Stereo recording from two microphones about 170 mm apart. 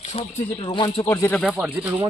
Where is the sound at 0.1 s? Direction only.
40° left (ahead or behind); by 1.4 s 15° left (ahead or behind).